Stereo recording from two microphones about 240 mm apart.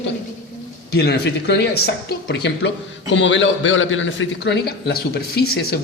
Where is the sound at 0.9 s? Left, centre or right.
Left.